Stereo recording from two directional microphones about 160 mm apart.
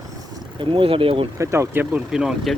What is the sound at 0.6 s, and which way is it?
Speech, 30° right (ahead or behind).